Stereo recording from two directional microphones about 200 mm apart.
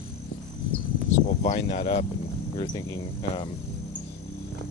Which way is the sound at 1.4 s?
30° left (ahead or behind).